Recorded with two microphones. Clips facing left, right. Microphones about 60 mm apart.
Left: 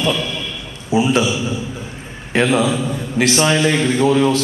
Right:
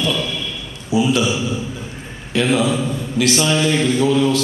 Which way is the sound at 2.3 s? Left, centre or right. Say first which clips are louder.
Left 1 dB; left.